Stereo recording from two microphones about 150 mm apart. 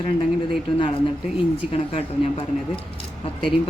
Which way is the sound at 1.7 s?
40° left (ahead or behind).